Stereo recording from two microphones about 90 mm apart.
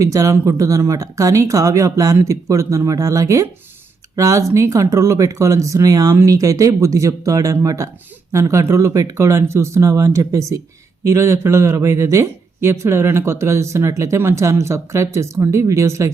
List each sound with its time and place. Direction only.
0.0 s speech: 35° right (ahead or behind)